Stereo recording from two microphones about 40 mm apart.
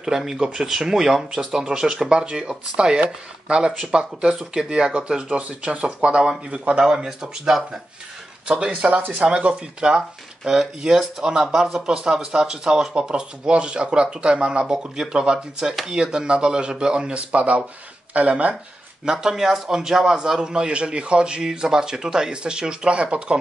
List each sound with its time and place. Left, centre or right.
0.0 s speech: centre; by 6.8 s right
6.8 s speech: centre
8.5 s speech: right
11.8 s speech: right
16.0 s speech: right
19.0 s speech: centre